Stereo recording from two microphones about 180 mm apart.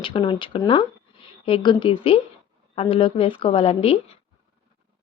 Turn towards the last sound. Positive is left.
turn(degrees=30)  # may be behind; listen again after turning